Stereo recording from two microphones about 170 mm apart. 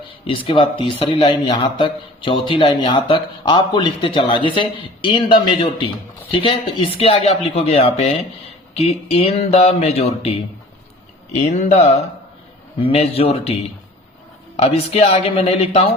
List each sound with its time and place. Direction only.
0.3 s a man's voice: 30° left (ahead or behind)
11.4 s a man's voice: 45° left (ahead or behind)